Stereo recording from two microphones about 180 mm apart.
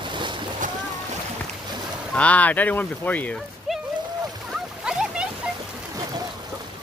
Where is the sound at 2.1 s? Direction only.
5° left (ahead or behind).